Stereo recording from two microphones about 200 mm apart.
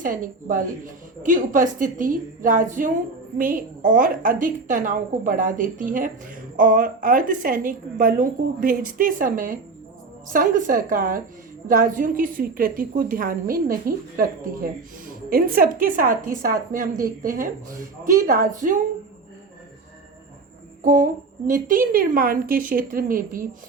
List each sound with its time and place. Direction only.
0.0 s a woman's voice: 40° right (ahead or behind)
20.8 s a woman's voice: 40° right (ahead or behind)